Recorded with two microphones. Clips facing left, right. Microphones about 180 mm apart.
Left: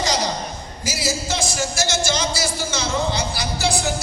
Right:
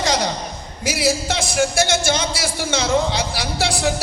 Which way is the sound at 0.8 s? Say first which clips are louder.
Right 6 dB; 60° right (ahead or behind).